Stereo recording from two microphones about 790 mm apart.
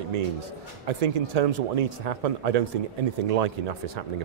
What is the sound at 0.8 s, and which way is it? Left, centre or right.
A man's voice, right.